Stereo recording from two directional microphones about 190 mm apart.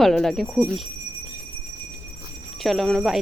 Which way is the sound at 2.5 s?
Centre (ahead or behind).